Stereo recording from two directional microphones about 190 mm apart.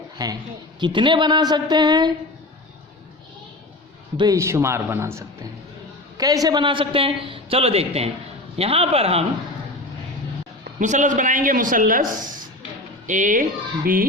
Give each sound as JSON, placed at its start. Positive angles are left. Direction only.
{"t": 0.2, "sound": "a man's voice", "side_deg": -20}
{"t": 4.2, "sound": "a man's voice", "side_deg": -15}
{"t": 10.6, "sound": "a man's voice", "side_deg": -40}